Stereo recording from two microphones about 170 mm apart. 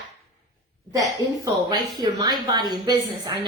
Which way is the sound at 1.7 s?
20° right (ahead or behind).